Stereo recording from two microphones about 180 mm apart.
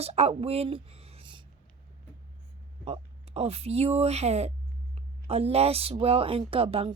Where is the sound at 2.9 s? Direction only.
35° right (ahead or behind).